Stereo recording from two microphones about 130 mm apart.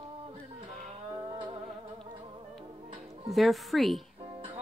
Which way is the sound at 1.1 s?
30° right (ahead or behind).